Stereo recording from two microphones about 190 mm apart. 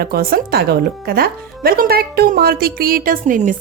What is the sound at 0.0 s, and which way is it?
Speech, 50° right (ahead or behind).